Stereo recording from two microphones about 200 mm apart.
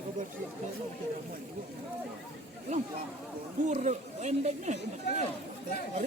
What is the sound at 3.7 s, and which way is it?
Speech, 35° right (ahead or behind).